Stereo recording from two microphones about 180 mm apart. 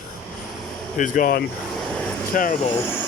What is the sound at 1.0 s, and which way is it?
Speech, 50° left (ahead or behind).